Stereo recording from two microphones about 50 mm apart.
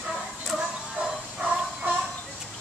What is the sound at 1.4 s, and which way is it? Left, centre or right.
Music, right.